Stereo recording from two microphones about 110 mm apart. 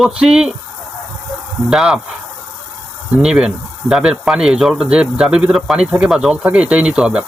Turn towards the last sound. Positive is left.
turn(degrees=-10)  # may be behind; listen again after turning